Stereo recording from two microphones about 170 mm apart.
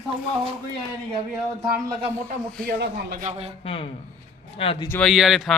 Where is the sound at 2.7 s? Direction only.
60° right (ahead or behind).